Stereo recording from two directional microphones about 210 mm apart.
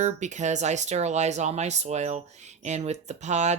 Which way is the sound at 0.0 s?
35° right (ahead or behind).